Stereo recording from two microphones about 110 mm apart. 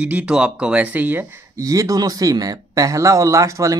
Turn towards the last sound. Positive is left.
turn(degrees=-30)  # may be behind; listen again after turning